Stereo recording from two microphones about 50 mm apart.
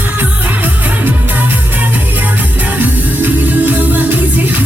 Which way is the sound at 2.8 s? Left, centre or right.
Right.